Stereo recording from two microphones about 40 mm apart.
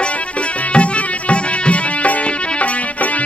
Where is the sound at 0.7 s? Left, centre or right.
Left.